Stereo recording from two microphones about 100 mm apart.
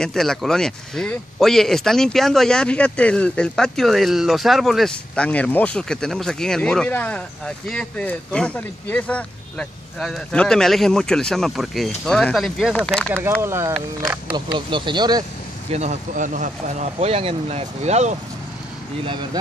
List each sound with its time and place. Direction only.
0.0 s speech: 5° left (ahead or behind)
5.1 s speech: 10° left (ahead or behind)
13.4 s speech: 25° right (ahead or behind)
14.3 s speech: 50° right (ahead or behind)
15.7 s speech: 90° right